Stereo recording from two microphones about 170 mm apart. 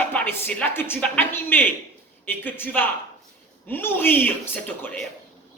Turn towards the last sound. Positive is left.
turn(degrees=10)  # may be behind; listen again after turning